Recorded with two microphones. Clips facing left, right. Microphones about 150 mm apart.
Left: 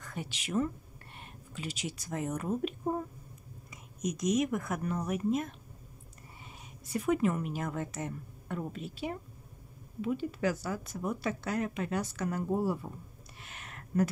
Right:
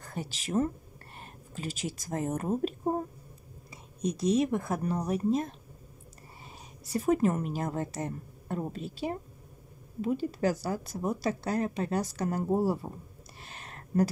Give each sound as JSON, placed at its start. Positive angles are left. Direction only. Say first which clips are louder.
{"t": 0.0, "sound": "a woman's voice", "louder": "right 3 dB", "side_deg": -35}
{"t": 6.8, "sound": "a woman's voice", "louder": "right 3 dB", "side_deg": -40}
{"t": 13.4, "sound": "a sound", "louder": "right 2 dB", "side_deg": -35}